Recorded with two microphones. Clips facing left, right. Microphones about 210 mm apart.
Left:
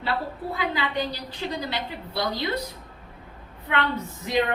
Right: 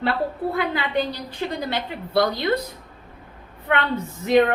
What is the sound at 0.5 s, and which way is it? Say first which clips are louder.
A woman's voice: right 4 dB; 55° right (ahead or behind).